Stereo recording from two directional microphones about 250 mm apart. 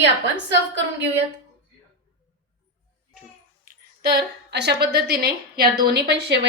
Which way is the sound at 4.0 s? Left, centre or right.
Right.